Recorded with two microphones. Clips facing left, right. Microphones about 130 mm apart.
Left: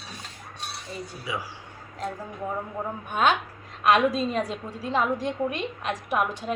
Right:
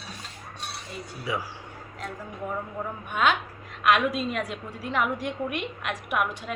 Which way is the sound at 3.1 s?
40° left (ahead or behind).